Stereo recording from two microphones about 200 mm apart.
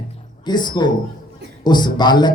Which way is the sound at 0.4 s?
20° left (ahead or behind).